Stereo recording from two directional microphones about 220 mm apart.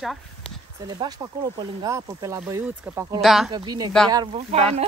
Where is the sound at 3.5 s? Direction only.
20° right (ahead or behind).